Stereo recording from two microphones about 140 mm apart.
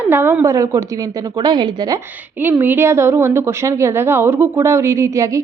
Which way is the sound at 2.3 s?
15° right (ahead or behind).